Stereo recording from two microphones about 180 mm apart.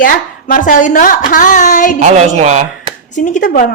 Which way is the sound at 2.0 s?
40° right (ahead or behind).